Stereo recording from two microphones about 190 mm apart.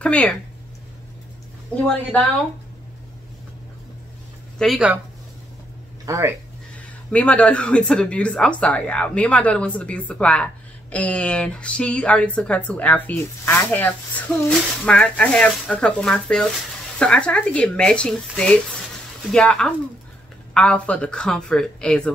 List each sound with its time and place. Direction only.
0.0 s speech: 5° left (ahead or behind)
4.6 s speech: centre (ahead or behind)
6.0 s speech: 15° right (ahead or behind)
7.1 s speech: 5° left (ahead or behind)